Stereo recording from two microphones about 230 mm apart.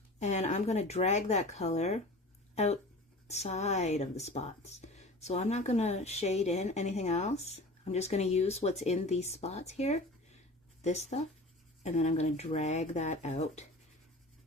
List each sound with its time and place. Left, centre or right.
0.2 s speech: left
3.2 s speech: left